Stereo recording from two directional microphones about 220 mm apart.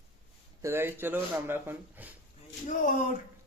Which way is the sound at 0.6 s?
10° right (ahead or behind).